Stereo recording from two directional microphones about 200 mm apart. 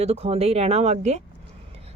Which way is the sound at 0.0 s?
30° right (ahead or behind).